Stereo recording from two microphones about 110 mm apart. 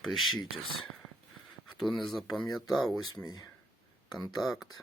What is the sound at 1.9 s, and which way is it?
Speech, 45° left (ahead or behind).